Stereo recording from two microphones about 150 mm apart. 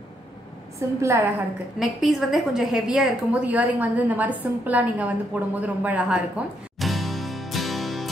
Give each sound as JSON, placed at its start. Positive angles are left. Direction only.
{"t": 0.7, "sound": "a woman's voice", "side_deg": -20}
{"t": 1.8, "sound": "a woman's voice", "side_deg": 0}